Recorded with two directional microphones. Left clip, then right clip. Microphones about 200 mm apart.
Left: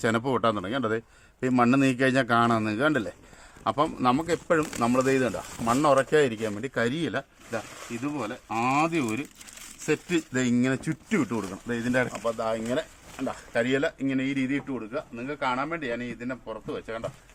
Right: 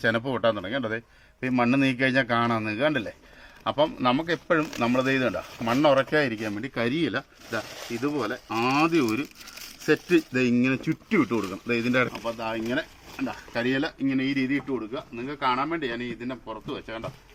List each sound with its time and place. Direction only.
0.0 s a man's voice: 30° left (ahead or behind); by 9.2 s 5° left (ahead or behind)
9.8 s a man's voice: 15° left (ahead or behind)
11.1 s speech: 5° left (ahead or behind)
12.1 s a man's voice: 25° left (ahead or behind); by 17.1 s 10° left (ahead or behind)